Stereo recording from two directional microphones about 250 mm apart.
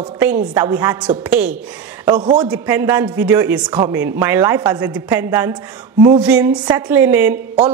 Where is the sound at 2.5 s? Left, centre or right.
Centre.